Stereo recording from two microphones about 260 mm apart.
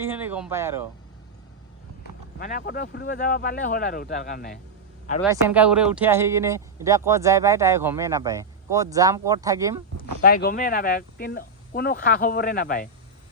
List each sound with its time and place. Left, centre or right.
0.0 s speech: centre
2.4 s speech: left
5.2 s speech: centre
10.0 s speech: left